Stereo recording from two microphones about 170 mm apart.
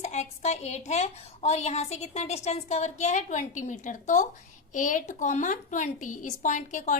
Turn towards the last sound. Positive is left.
turn(degrees=45)  # may be behind; listen again after turning